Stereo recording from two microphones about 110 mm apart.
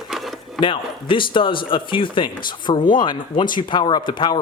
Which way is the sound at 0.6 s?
50° left (ahead or behind).